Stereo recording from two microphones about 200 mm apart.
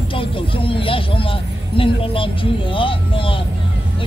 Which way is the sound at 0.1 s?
25° left (ahead or behind).